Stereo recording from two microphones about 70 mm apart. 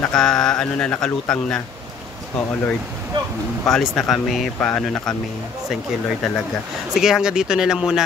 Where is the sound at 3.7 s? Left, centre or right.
Centre.